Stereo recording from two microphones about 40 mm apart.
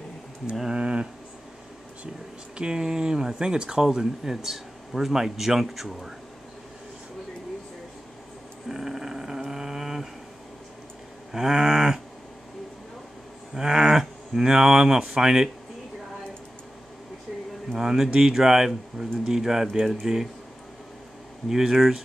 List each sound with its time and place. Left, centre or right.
0.7 s speech: right
2.5 s speech: centre
8.6 s a sound: centre
11.3 s speech: centre
13.6 s speech: centre
17.7 s speech: centre
21.5 s speech: centre